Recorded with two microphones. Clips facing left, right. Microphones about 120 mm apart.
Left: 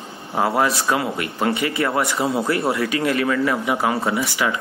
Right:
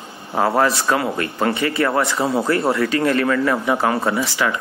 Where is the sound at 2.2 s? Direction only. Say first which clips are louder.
Right 2 dB; 25° right (ahead or behind).